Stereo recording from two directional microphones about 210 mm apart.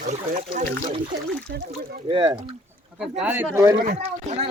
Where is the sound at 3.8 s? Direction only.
30° right (ahead or behind).